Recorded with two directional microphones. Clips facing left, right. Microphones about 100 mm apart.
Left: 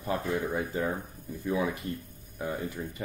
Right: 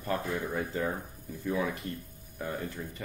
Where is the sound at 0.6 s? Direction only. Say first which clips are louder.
Left 1 dB; 15° left (ahead or behind).